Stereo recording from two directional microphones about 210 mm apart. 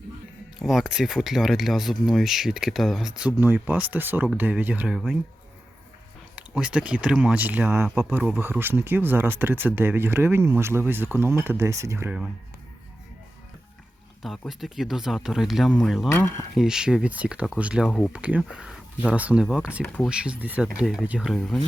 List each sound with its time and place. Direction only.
0.6 s speech: centre (ahead or behind)
6.3 s speech: 5° right (ahead or behind)
14.2 s speech: centre (ahead or behind)
16.0 s speech: 10° left (ahead or behind)
16.6 s speech: 5° right (ahead or behind)
19.8 s speech: 10° left (ahead or behind)
20.1 s speech: 5° right (ahead or behind)